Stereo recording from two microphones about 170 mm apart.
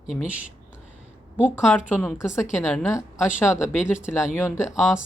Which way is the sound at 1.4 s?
Centre (ahead or behind).